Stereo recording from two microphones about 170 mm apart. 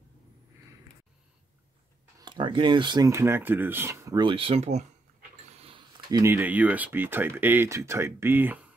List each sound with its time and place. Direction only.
2.1 s speech: 25° right (ahead or behind)
5.5 s dog: 35° right (ahead or behind)
6.2 s speech: 10° right (ahead or behind)